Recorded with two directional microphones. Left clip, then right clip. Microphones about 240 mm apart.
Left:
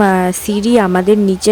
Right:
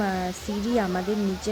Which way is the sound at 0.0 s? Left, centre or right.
Left.